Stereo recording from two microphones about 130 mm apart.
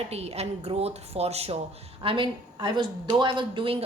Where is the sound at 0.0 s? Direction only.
55° right (ahead or behind).